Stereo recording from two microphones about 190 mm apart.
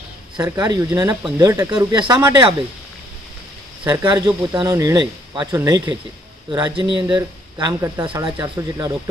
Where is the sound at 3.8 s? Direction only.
20° right (ahead or behind).